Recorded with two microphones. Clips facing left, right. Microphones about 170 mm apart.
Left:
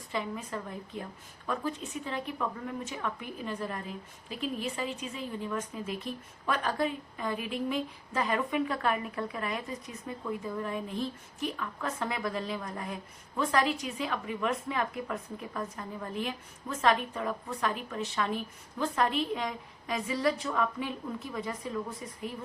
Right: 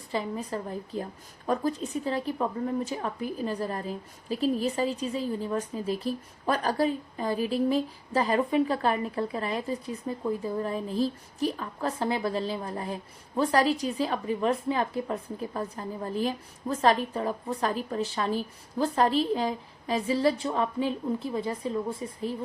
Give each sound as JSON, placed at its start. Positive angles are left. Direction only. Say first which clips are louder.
{"t": 0.1, "sound": "a woman's voice", "louder": "right 4 dB", "side_deg": -35}